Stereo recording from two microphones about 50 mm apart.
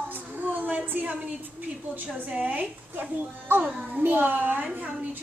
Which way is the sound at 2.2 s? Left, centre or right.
Right.